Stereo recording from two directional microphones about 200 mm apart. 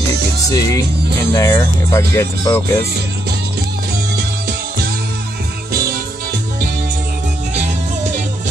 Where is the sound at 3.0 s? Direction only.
55° right (ahead or behind).